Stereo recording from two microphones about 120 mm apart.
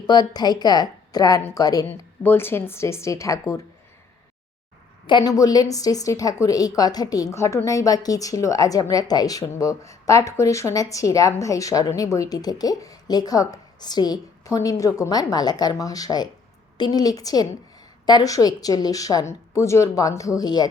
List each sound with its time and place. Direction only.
0.1 s a woman's voice: 35° left (ahead or behind)
2.2 s a woman's voice: 20° left (ahead or behind)
5.0 s a woman's voice: 40° left (ahead or behind)
5.3 s a woman's voice: 30° left (ahead or behind)